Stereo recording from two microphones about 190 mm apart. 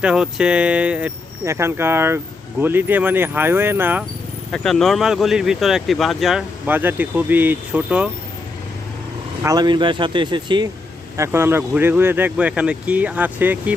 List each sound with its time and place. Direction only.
0.0 s speech: 5° right (ahead or behind)
4.5 s speech: centre (ahead or behind)
9.4 s speech: 20° right (ahead or behind)
11.2 s speech: 10° right (ahead or behind)